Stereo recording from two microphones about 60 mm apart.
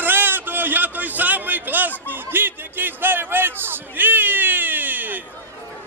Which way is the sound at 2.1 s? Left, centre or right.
Right.